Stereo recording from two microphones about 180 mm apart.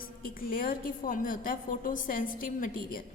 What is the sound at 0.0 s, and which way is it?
A woman's voice, 50° left (ahead or behind).